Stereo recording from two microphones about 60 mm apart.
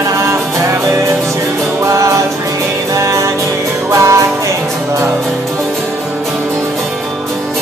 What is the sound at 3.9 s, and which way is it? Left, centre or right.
Music, right.